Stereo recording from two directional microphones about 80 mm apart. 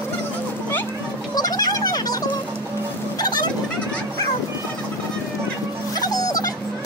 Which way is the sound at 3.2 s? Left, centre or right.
Left.